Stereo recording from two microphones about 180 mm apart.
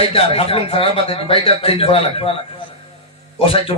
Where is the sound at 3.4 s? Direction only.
30° left (ahead or behind).